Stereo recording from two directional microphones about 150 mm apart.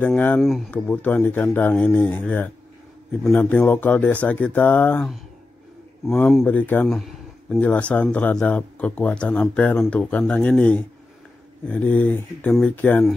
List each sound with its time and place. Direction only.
0.0 s speech: 10° left (ahead or behind)
0.4 s speech: centre (ahead or behind)
0.8 s speech: 10° left (ahead or behind)
6.4 s speech: 10° left (ahead or behind)